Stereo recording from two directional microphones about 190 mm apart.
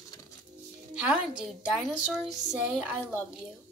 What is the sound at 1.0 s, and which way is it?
A woman's voice, 5° right (ahead or behind).